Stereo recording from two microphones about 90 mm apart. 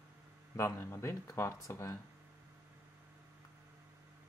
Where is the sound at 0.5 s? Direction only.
30° left (ahead or behind).